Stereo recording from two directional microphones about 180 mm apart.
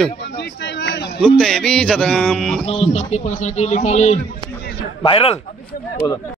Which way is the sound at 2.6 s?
35° left (ahead or behind).